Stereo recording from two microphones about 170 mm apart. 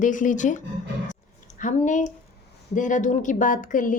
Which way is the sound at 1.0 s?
50° left (ahead or behind).